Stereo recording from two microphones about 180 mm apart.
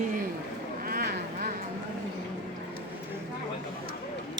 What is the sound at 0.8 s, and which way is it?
Vehicle, 55° right (ahead or behind).